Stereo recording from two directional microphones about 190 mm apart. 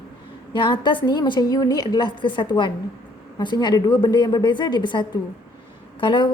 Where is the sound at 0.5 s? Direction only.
25° left (ahead or behind).